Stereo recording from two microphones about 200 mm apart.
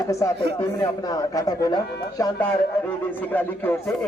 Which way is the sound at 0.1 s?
15° left (ahead or behind).